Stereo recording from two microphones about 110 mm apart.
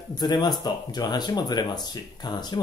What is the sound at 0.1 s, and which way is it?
Speech, 40° left (ahead or behind).